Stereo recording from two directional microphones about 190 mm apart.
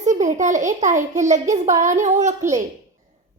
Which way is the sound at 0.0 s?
40° right (ahead or behind).